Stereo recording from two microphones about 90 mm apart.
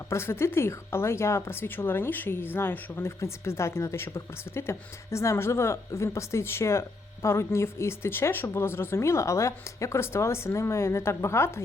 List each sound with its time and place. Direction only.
0.1 s speech: 30° left (ahead or behind)